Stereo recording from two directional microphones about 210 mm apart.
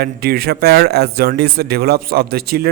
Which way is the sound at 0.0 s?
50° right (ahead or behind).